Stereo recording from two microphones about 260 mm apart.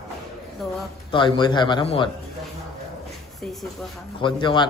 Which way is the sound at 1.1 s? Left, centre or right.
Centre.